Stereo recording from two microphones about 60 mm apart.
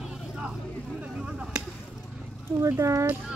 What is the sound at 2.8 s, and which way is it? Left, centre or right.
Speech, right.